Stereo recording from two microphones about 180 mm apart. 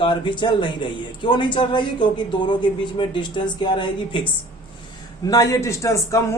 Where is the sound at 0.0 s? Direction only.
25° left (ahead or behind).